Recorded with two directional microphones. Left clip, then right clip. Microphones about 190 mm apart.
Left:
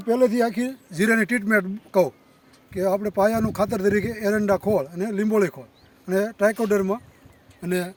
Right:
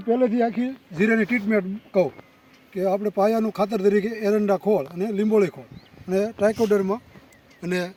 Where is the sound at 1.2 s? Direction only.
5° left (ahead or behind).